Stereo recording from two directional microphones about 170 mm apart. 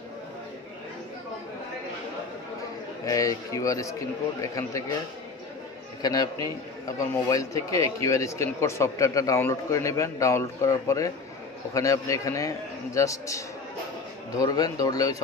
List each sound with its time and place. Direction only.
3.1 s a man's voice: 20° left (ahead or behind)
6.0 s a man's voice: 20° left (ahead or behind)